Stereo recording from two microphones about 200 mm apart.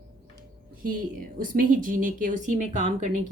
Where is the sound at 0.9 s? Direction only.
45° right (ahead or behind).